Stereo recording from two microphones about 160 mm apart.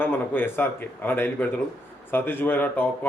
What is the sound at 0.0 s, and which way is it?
A man's voice, 15° left (ahead or behind).